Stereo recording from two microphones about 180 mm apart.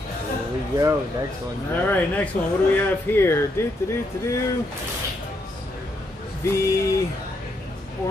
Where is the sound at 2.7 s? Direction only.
15° left (ahead or behind).